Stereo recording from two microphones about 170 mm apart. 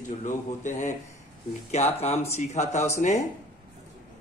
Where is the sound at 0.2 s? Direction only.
45° left (ahead or behind).